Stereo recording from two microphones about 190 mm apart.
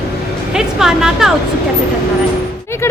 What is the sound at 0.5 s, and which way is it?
Speech, 5° right (ahead or behind).